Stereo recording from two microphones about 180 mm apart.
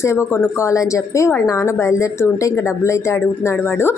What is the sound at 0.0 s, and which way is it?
A woman's voice, 15° left (ahead or behind).